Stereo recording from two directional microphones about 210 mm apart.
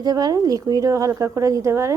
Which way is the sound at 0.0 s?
20° right (ahead or behind).